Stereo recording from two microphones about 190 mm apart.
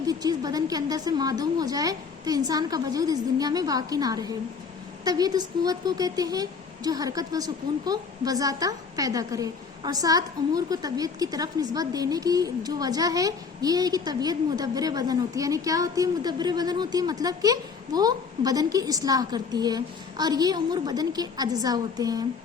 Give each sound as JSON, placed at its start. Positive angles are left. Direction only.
{"t": 0.0, "sound": "speech", "side_deg": -20}